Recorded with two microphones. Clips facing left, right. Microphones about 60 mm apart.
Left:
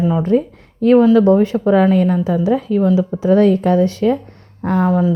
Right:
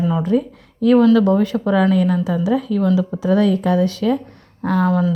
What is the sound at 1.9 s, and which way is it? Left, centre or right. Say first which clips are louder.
Speech: left 2 dB; left.